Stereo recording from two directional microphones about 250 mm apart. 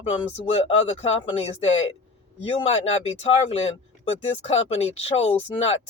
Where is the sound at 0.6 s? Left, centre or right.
Left.